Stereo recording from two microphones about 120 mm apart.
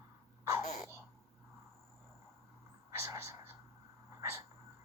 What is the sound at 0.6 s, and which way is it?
Sneeze, 70° left (ahead or behind).